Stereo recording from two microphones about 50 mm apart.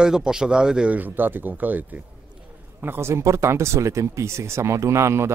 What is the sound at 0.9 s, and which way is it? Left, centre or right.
Speech, right.